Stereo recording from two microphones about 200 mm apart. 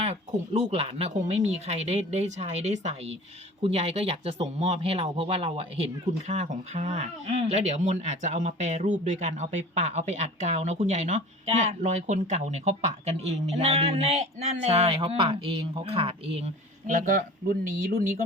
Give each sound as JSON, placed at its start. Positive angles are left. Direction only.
{"t": 0.0, "sound": "speech", "side_deg": -30}